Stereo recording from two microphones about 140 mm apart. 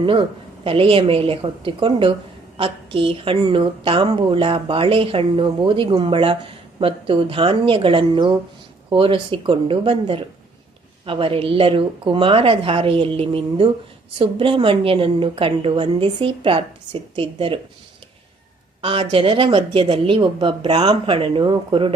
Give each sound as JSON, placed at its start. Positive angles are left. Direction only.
{"t": 0.0, "sound": "a woman's voice", "side_deg": -40}
{"t": 18.8, "sound": "a woman's voice", "side_deg": -40}